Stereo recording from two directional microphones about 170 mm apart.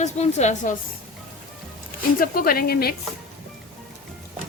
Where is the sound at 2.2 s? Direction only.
55° left (ahead or behind).